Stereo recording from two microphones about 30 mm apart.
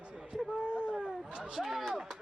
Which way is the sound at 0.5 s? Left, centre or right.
Left.